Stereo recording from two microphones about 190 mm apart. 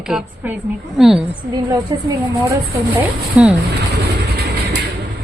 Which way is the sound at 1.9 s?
20° right (ahead or behind).